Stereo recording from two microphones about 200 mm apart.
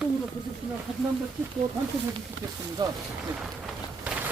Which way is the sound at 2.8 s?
20° right (ahead or behind).